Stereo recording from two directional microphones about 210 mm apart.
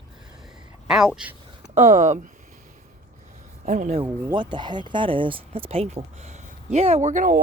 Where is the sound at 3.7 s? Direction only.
35° right (ahead or behind).